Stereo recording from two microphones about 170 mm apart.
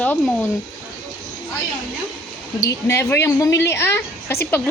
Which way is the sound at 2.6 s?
20° left (ahead or behind).